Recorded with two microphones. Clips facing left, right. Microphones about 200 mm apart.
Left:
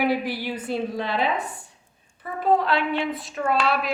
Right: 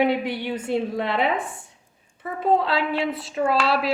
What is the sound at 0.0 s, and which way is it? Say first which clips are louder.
A woman's voice: right 2 dB; 25° right (ahead or behind).